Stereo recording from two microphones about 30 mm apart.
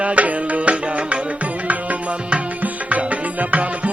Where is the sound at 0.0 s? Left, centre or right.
Right.